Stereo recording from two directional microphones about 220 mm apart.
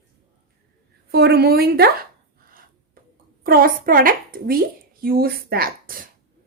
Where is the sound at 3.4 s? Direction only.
40° right (ahead or behind).